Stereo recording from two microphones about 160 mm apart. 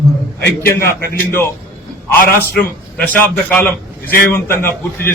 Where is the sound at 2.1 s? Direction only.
70° left (ahead or behind).